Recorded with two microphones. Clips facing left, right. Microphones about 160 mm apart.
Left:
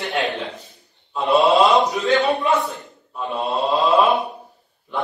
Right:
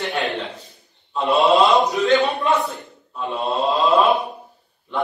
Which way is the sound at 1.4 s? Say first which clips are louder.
Right 1 dB; centre (ahead or behind).